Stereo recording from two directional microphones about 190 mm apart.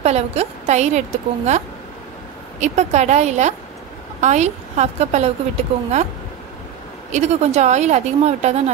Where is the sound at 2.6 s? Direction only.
35° right (ahead or behind).